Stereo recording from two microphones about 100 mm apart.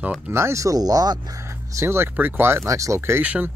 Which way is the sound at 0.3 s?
30° right (ahead or behind).